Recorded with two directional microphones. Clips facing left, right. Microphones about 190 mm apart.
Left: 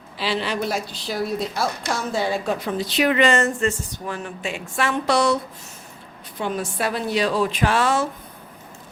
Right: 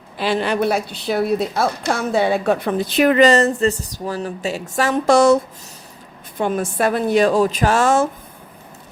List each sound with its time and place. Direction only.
0.2 s a woman's voice: 50° right (ahead or behind)